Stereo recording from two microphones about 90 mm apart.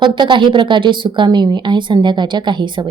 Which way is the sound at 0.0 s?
60° right (ahead or behind).